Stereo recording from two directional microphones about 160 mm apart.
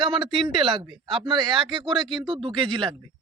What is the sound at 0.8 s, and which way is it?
Speech, 30° right (ahead or behind).